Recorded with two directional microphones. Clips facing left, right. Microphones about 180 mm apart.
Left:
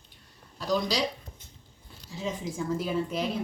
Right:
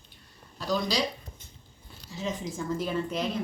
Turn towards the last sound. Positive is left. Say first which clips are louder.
# left 1 dB
turn(degrees=5)  # may be behind; listen again after turning